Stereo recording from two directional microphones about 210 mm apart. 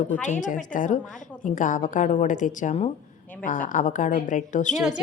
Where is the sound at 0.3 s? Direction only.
35° left (ahead or behind).